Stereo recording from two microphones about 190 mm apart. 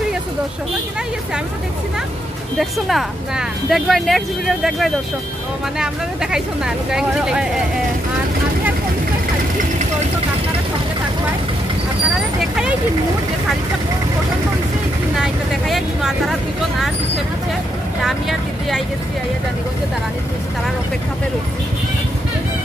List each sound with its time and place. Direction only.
2.6 s speech: centre (ahead or behind)
6.3 s speech: 5° right (ahead or behind)
15.1 s speech: centre (ahead or behind)